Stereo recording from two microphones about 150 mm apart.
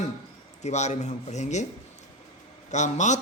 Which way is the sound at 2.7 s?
50° left (ahead or behind).